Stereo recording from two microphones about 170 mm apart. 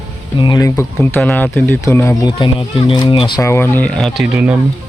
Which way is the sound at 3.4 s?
15° left (ahead or behind).